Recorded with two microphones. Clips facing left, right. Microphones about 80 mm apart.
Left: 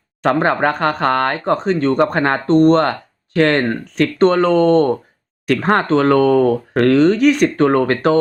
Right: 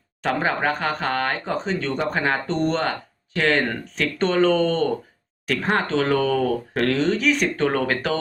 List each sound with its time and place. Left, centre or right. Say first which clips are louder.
0.2 s speech: left 7 dB; left
7.5 s speech: left 7 dB; left